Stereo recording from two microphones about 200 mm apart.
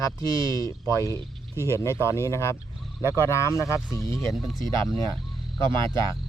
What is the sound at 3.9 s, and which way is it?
Speech, 15° left (ahead or behind).